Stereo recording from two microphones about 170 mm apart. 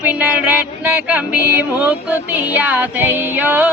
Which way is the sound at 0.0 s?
10° right (ahead or behind).